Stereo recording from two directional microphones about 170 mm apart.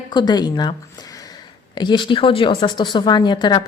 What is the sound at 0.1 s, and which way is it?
Speech, 25° left (ahead or behind).